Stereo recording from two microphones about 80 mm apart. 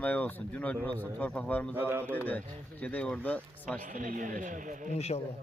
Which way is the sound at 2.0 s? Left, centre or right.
Left.